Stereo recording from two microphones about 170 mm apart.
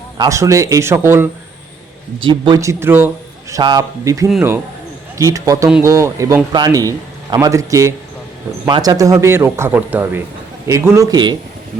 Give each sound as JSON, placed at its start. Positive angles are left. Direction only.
{"t": 0.2, "sound": "speech", "side_deg": -20}
{"t": 2.2, "sound": "speech", "side_deg": -25}
{"t": 3.5, "sound": "a man's voice", "side_deg": -25}